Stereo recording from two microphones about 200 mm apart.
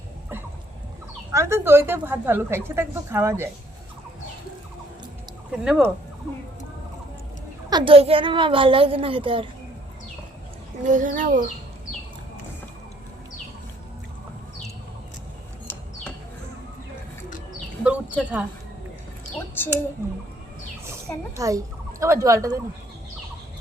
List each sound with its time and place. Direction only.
1.3 s a woman's voice: 15° right (ahead or behind)
5.5 s speech: 5° right (ahead or behind)
7.7 s a child's voice: 25° right (ahead or behind)
10.8 s a child's voice: 40° right (ahead or behind)
17.8 s speech: 5° right (ahead or behind)
19.4 s a sound: 10° left (ahead or behind)
21.3 s a woman's voice: 15° right (ahead or behind)